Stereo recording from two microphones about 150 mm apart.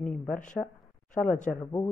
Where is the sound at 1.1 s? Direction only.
60° left (ahead or behind).